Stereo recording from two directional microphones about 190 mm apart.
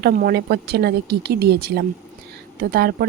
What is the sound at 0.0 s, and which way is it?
Speech, 50° right (ahead or behind).